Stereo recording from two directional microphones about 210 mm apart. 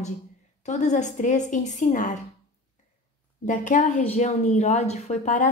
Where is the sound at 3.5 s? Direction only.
35° left (ahead or behind).